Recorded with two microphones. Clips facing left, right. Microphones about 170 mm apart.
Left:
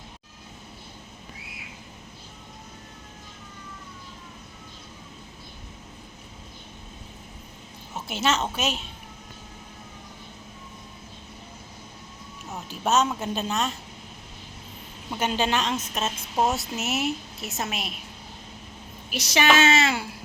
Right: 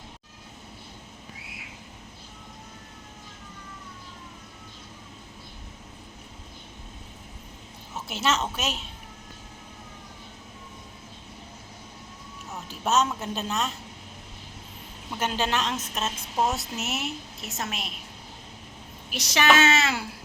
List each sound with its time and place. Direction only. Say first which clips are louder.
7.9 s a woman's voice: left 1 dB; centre (ahead or behind)
12.6 s music: left 1 dB; centre (ahead or behind)
13.1 s a woman's voice: left 2 dB; centre (ahead or behind)
15.1 s a woman's voice: left 2 dB; centre (ahead or behind)
19.1 s a woman's voice: left 1 dB; centre (ahead or behind)